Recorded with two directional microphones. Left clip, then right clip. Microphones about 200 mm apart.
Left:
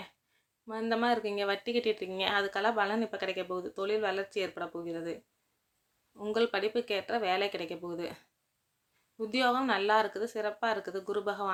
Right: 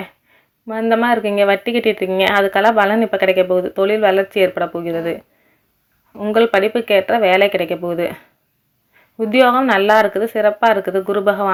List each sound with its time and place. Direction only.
0.7 s speech: 20° right (ahead or behind)
6.1 s speech: 20° right (ahead or behind)
9.1 s speech: 20° right (ahead or behind)